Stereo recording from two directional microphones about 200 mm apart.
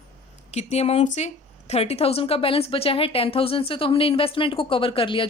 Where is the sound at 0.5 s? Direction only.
30° left (ahead or behind).